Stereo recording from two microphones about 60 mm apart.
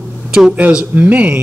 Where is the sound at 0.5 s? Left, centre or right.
Right.